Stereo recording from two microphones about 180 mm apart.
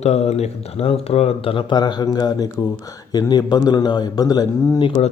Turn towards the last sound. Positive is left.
turn(degrees=20)  # may be behind; listen again after turning